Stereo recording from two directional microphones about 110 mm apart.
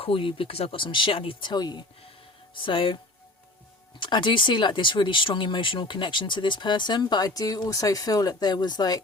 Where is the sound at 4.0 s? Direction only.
45° left (ahead or behind).